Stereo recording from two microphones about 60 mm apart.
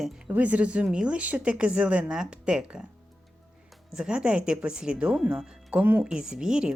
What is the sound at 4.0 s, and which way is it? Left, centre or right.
A woman's voice, centre.